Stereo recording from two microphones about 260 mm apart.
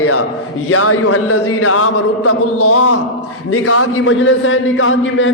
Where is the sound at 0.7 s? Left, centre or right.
Left.